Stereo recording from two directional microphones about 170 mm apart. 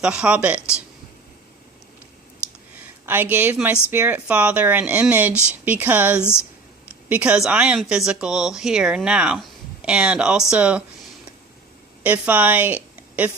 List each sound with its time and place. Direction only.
0.0 s speech: 5° right (ahead or behind)
3.1 s speech: 10° right (ahead or behind)
5.3 s speech: 15° left (ahead or behind)
5.6 s speech: 10° right (ahead or behind)
12.0 s a woman's voice: 10° right (ahead or behind)